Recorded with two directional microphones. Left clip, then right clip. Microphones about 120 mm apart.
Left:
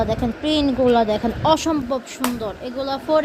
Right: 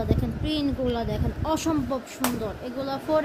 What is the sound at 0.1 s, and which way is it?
Speech, 15° left (ahead or behind).